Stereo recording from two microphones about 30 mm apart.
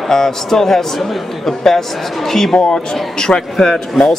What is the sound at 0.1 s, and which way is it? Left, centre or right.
A man's voice, centre.